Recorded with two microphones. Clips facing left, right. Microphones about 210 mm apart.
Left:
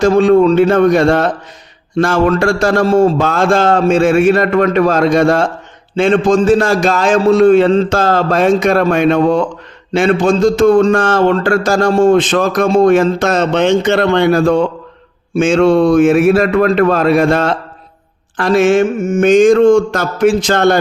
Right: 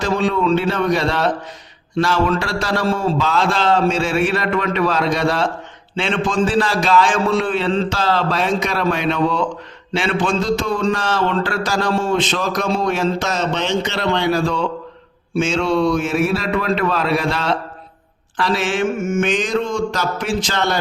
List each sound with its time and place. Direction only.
0.0 s a man's voice: 45° left (ahead or behind)